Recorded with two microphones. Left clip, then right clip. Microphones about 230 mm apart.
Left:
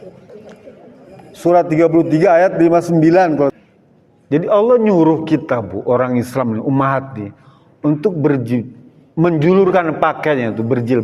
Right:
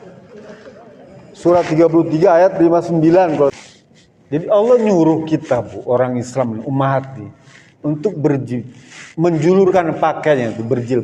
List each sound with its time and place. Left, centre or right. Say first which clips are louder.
1.4 s a man's voice: even; left